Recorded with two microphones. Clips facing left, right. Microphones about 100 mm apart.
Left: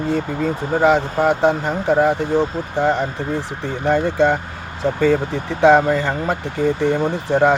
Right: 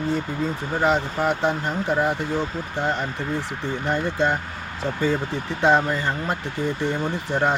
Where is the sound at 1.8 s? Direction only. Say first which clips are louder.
Left 7 dB; 55° left (ahead or behind).